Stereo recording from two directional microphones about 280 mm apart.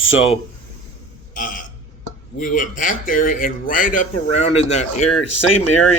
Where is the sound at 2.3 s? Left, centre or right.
Left.